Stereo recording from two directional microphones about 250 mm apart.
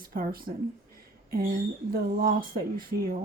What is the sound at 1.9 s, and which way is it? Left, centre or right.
Speech, right.